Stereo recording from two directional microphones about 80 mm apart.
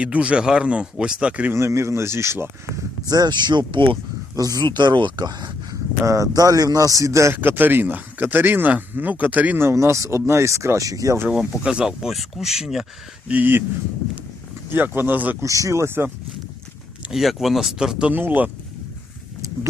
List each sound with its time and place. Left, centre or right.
0.0 s speech: centre
1.5 s speech: right
3.1 s speech: right
4.4 s speech: right
4.6 s speech: right
6.1 s speech: right
7.4 s speech: right
9.6 s speech: right
11.3 s speech: centre
13.2 s speech: right
14.7 s speech: right
15.4 s speech: right
17.1 s speech: centre
18.1 s speech: right